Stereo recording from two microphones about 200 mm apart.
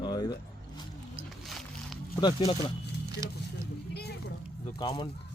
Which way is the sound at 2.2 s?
25° left (ahead or behind).